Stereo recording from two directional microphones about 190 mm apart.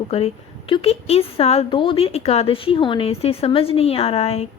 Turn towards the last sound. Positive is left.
turn(degrees=30)  # may be behind; listen again after turning